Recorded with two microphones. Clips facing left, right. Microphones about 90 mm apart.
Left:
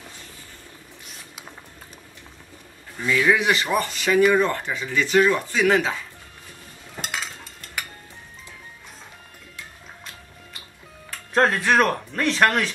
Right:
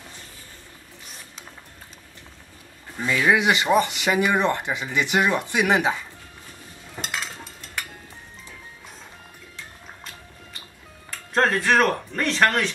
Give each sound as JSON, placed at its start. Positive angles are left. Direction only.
{"t": 3.1, "sound": "speech", "side_deg": -20}
{"t": 7.0, "sound": "a sound", "side_deg": 0}
{"t": 11.1, "sound": "speech", "side_deg": 0}